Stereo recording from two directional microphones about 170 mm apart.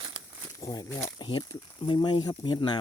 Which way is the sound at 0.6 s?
20° left (ahead or behind).